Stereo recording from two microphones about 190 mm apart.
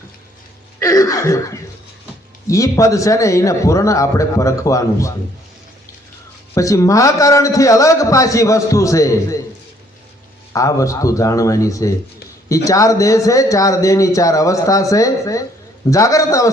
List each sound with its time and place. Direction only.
0.8 s laughter: 15° left (ahead or behind)
2.5 s a man's voice: 15° left (ahead or behind)
6.5 s a man's voice: 15° left (ahead or behind)
10.5 s a man's voice: 15° left (ahead or behind)